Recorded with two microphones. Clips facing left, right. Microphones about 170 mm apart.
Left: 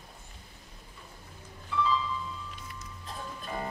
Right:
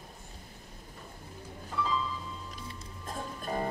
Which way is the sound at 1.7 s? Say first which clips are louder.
Left 3 dB; 45° right (ahead or behind).